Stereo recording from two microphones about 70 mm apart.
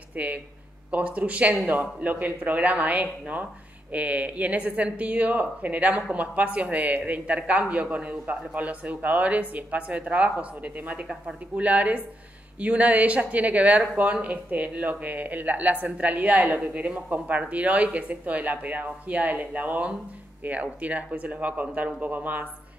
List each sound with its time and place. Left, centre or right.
0.1 s speech: right